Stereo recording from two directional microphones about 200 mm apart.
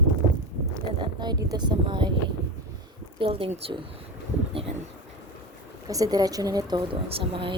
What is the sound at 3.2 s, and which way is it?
Speech, 25° right (ahead or behind).